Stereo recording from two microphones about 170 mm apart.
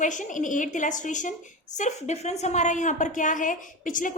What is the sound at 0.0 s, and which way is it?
A woman's voice, 50° left (ahead or behind).